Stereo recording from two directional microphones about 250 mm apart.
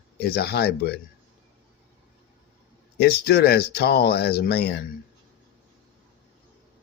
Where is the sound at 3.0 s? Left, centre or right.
Left.